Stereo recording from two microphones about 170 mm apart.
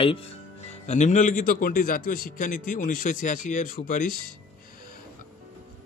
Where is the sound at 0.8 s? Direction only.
45° left (ahead or behind).